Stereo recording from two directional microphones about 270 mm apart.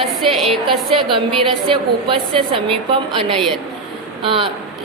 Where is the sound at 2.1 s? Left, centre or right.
Centre.